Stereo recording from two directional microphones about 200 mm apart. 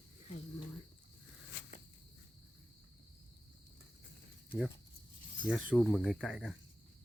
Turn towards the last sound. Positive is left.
turn(degrees=0)  # may be behind; listen again after turning